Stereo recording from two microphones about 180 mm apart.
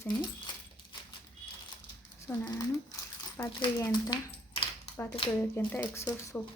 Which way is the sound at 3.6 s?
20° left (ahead or behind).